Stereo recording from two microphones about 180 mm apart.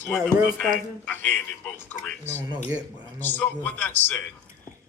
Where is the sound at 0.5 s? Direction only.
5° left (ahead or behind).